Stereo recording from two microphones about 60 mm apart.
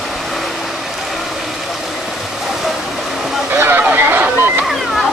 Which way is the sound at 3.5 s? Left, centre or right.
Right.